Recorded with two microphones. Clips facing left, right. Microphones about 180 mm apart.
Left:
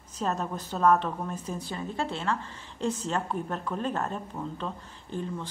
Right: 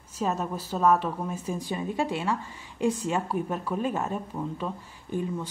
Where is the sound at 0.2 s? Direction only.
5° right (ahead or behind).